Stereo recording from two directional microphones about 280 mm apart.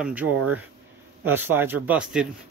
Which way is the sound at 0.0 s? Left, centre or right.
Centre.